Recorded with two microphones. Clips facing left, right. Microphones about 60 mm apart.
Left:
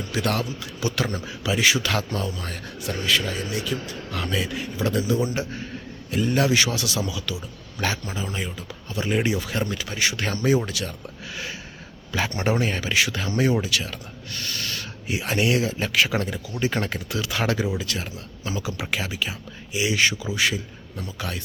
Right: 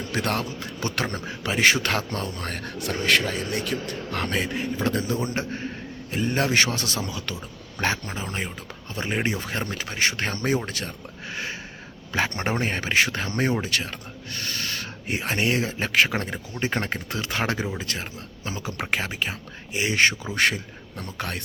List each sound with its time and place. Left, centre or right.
0.1 s a man's voice: right
12.1 s a man's voice: right
14.3 s owl: right
15.0 s a man's voice: right